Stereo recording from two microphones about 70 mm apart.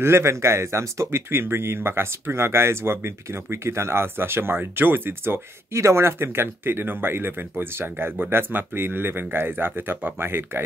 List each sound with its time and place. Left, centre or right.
0.0 s speech: right